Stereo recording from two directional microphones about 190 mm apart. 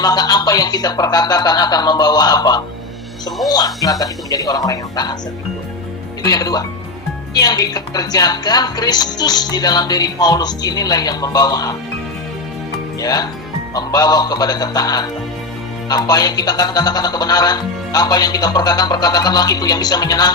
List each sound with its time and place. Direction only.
0.0 s speech: 20° left (ahead or behind)
6.2 s speech: 20° left (ahead or behind)
13.0 s speech: 20° left (ahead or behind)